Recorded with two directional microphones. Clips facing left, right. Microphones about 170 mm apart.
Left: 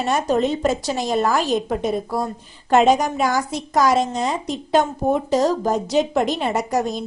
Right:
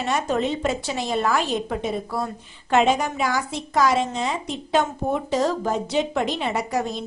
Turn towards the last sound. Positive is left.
turn(degrees=45)  # may be behind; listen again after turning